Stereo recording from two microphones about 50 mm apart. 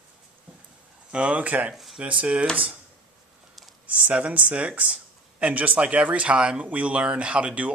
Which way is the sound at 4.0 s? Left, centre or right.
Right.